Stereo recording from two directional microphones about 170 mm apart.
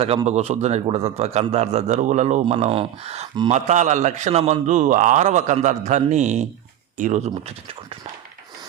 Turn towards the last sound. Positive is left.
turn(degrees=-40)  # may be behind; listen again after turning